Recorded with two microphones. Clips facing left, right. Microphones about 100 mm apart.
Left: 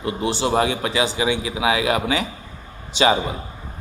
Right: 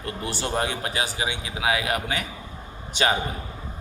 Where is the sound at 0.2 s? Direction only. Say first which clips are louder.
Left 7 dB; 90° left.